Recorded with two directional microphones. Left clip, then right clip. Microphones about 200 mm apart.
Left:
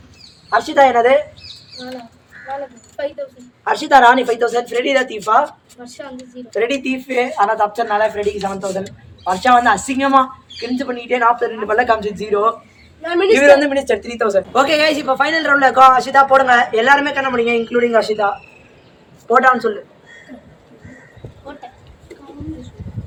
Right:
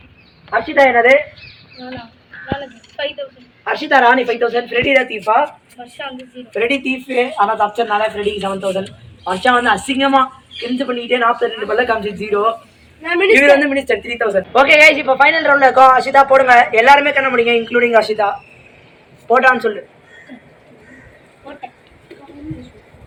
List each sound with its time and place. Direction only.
0.5 s a man's voice: 5° right (ahead or behind)
3.6 s a man's voice: 10° right (ahead or behind)
6.5 s a man's voice: 10° right (ahead or behind)
14.1 s a man's voice: 5° right (ahead or behind)
14.5 s a man's voice: 15° left (ahead or behind)
16.7 s speech: 35° left (ahead or behind)